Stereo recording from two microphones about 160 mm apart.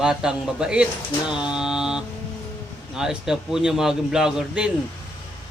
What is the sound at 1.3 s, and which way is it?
Mantra, 5° right (ahead or behind).